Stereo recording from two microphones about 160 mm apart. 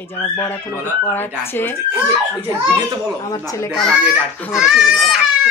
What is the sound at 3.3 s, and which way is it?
Speech, 20° left (ahead or behind).